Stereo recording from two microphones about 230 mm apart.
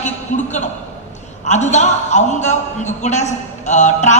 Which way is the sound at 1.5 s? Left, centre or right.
Left.